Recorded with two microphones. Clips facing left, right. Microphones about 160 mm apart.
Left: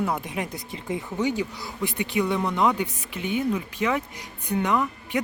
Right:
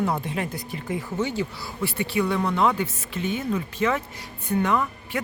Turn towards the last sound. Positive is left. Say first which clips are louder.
# even
turn(degrees=15)  # may be behind; listen again after turning